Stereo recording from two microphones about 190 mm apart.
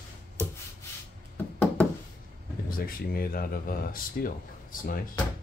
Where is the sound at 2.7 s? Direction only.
50° left (ahead or behind).